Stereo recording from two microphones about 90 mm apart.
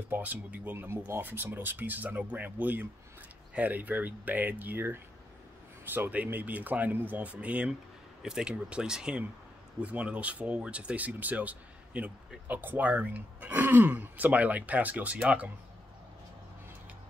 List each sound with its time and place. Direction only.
0.1 s speech: 20° right (ahead or behind)